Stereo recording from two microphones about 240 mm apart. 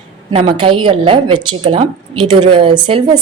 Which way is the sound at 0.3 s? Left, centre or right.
Centre.